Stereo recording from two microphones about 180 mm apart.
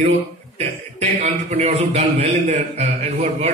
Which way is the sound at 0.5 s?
40° right (ahead or behind).